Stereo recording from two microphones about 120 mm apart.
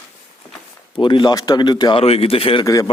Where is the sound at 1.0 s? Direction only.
40° left (ahead or behind).